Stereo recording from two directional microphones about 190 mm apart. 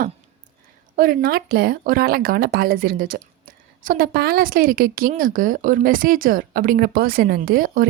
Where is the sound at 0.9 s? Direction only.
50° right (ahead or behind).